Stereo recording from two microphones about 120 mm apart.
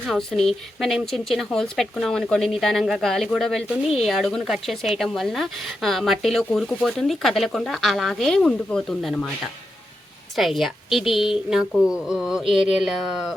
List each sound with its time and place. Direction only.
0.1 s speech: 5° left (ahead or behind)
10.3 s speech: centre (ahead or behind)